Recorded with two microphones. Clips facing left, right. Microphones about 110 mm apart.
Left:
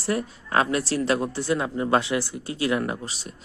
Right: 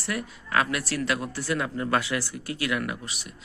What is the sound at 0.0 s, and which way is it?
A woman's voice, 30° left (ahead or behind).